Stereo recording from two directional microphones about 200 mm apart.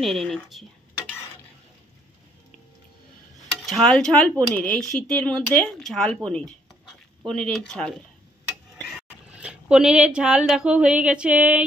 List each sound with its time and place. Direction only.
0.0 s speech: centre (ahead or behind)
3.6 s speech: centre (ahead or behind)